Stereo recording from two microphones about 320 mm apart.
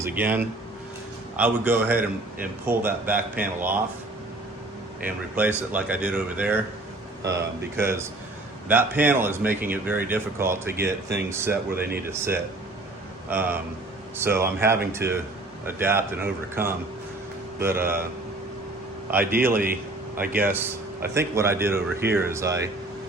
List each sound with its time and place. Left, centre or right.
0.0 s speech: centre
5.0 s speech: centre
11.7 s speech: right
12.0 s speech: centre
19.2 s speech: right
20.3 s speech: centre